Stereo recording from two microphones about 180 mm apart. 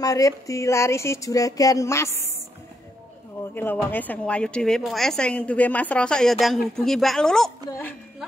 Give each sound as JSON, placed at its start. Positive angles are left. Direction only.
{"t": 0.0, "sound": "speech", "side_deg": 20}
{"t": 3.5, "sound": "a woman's voice", "side_deg": 10}